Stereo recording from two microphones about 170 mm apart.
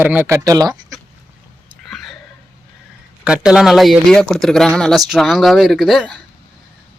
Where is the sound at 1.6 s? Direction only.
Centre (ahead or behind).